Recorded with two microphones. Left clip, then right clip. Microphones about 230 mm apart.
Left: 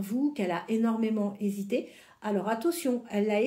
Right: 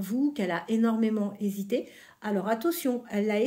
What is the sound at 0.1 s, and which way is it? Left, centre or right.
Speech, right.